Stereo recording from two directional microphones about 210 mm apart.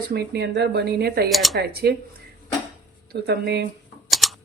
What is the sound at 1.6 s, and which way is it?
Speech, 50° right (ahead or behind).